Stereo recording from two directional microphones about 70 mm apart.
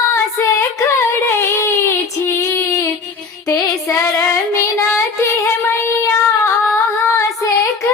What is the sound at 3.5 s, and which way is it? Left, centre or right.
Music, left.